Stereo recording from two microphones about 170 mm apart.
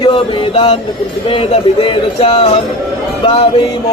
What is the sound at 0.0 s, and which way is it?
Speech, 30° left (ahead or behind).